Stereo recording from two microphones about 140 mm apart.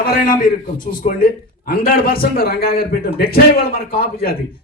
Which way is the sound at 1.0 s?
90° left.